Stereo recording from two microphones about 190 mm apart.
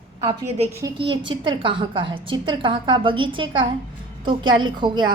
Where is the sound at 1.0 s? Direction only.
25° right (ahead or behind).